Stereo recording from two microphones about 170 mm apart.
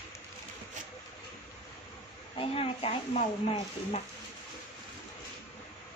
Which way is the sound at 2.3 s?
35° left (ahead or behind).